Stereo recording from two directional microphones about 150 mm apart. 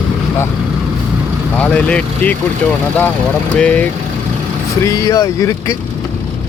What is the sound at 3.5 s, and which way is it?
Speech, 10° left (ahead or behind).